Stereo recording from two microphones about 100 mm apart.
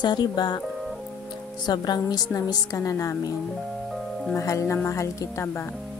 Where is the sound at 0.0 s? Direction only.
45° left (ahead or behind).